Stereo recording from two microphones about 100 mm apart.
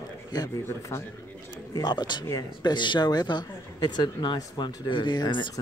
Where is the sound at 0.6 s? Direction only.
30° left (ahead or behind).